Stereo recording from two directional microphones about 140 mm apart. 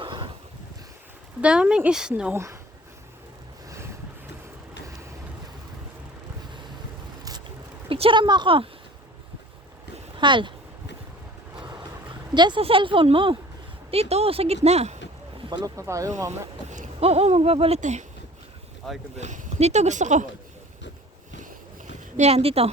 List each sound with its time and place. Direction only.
0.0 s a sound: 35° right (ahead or behind)
1.4 s speech: 5° right (ahead or behind)
2.3 s speech: 20° right (ahead or behind)
7.9 s a woman's voice: 40° right (ahead or behind)
10.2 s speech: 35° right (ahead or behind)
11.5 s vehicle: 30° right (ahead or behind)
12.3 s speech: 30° right (ahead or behind); by 14.9 s 50° right (ahead or behind)
15.4 s speech: 30° right (ahead or behind)
16.6 s a sound: 60° right (ahead or behind)
17.0 s speech: 45° right (ahead or behind)
17.7 s speech: 60° right (ahead or behind)
19.1 s speech: 60° right (ahead or behind)
22.2 s speech: 45° right (ahead or behind)